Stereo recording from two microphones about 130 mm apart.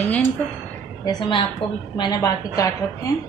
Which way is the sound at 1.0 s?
35° left (ahead or behind).